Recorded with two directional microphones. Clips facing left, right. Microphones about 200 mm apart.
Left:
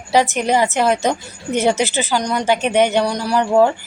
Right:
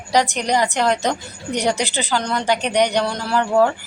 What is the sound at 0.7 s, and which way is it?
A woman's voice, 20° left (ahead or behind).